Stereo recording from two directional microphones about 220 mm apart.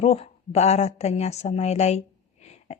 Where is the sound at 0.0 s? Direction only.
30° left (ahead or behind).